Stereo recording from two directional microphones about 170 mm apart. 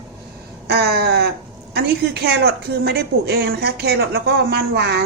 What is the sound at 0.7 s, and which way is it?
A woman's voice, 70° right (ahead or behind).